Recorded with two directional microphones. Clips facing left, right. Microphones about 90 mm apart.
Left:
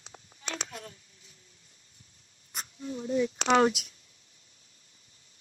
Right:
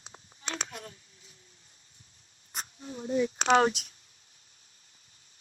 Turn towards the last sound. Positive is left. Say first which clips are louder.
# even
turn(degrees=-40)  # may be behind; listen again after turning